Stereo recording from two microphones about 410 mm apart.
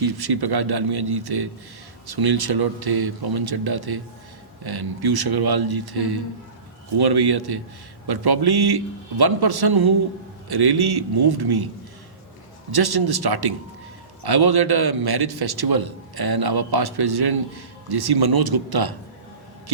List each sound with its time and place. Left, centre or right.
0.0 s a man's voice: right
12.7 s a man's voice: right